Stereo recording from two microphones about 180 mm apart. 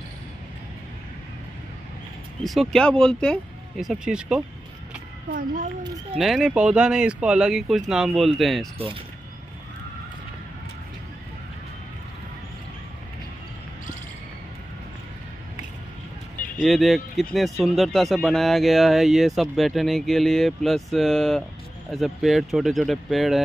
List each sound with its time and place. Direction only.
2.4 s speech: centre (ahead or behind)
5.3 s a child's voice: 50° right (ahead or behind)
6.1 s speech: centre (ahead or behind)
8.7 s speech: 30° right (ahead or behind)
16.5 s speech: centre (ahead or behind)